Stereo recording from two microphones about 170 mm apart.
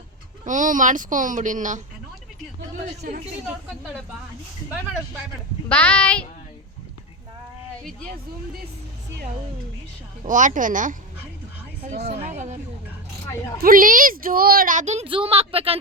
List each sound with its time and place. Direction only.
0.4 s speech: 50° right (ahead or behind)
3.0 s a woman's voice: 55° right (ahead or behind)
5.6 s speech: 10° left (ahead or behind)
10.2 s speech: 50° right (ahead or behind)
12.0 s speech: 40° right (ahead or behind)
13.6 s speech: 55° right (ahead or behind); by 15.8 s 35° right (ahead or behind)